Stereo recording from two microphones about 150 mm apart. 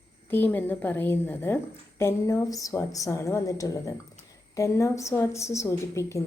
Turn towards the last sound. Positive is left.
turn(degrees=20)  # may be behind; listen again after turning